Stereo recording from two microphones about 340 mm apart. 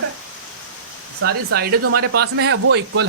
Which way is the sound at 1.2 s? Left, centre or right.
Right.